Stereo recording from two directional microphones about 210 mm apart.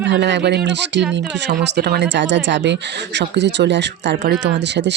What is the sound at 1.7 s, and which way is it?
Speech, 55° right (ahead or behind).